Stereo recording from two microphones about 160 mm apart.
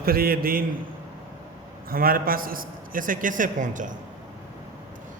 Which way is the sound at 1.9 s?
65° right (ahead or behind).